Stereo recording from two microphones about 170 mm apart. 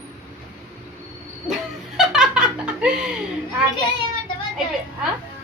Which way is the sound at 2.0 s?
5° right (ahead or behind).